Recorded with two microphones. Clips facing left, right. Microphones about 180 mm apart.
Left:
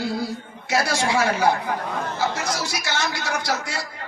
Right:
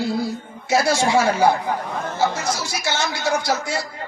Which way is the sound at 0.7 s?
25° right (ahead or behind).